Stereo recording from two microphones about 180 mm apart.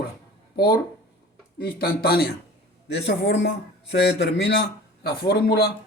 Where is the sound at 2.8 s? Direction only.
70° left (ahead or behind).